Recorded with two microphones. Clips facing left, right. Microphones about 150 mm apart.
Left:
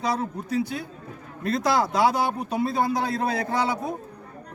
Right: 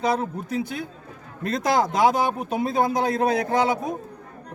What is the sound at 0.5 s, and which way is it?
A man's voice, 20° right (ahead or behind).